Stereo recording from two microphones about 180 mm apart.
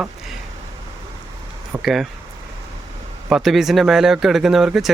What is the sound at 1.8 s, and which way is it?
Speech, centre (ahead or behind).